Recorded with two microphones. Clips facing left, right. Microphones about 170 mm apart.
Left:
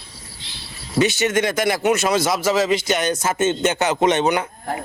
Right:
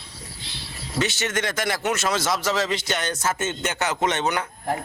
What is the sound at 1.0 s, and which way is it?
A man's voice, 15° left (ahead or behind).